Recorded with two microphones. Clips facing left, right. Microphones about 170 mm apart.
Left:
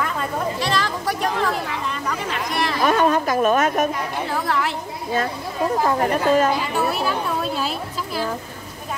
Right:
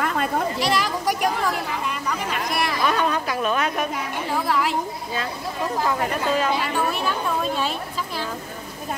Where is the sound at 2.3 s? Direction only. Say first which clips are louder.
Left 1 dB; 5° right (ahead or behind).